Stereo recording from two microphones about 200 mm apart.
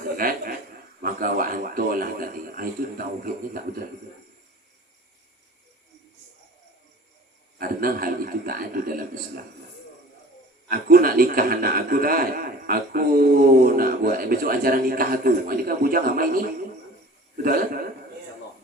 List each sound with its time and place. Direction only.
0.2 s a sound: 45° right (ahead or behind)
1.0 s a man's voice: 45° right (ahead or behind)
7.6 s a man's voice: 45° right (ahead or behind)
10.7 s a man's voice: 45° right (ahead or behind)